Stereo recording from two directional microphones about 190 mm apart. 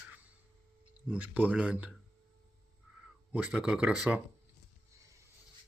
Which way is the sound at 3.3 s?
5° right (ahead or behind).